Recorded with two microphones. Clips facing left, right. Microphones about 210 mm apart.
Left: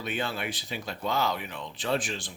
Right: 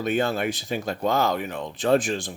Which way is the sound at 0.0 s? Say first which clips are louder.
Right 9 dB; 45° right (ahead or behind).